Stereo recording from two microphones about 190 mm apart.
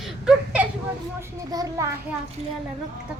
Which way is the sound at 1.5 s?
20° right (ahead or behind).